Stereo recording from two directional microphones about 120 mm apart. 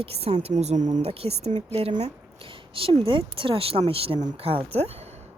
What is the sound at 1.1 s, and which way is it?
Speech, 55° right (ahead or behind).